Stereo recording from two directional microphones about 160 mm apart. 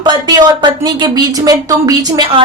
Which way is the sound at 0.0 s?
25° right (ahead or behind).